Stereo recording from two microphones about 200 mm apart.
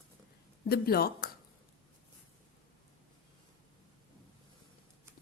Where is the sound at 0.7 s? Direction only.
50° left (ahead or behind).